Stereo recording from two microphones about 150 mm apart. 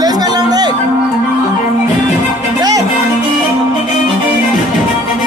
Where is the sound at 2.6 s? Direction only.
25° right (ahead or behind).